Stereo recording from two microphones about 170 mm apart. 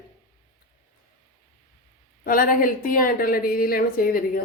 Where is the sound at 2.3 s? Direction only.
55° left (ahead or behind).